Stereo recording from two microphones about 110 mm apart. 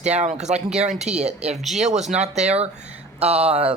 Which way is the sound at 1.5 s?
Centre (ahead or behind).